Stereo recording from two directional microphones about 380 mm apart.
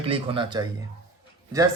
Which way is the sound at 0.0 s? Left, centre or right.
Centre.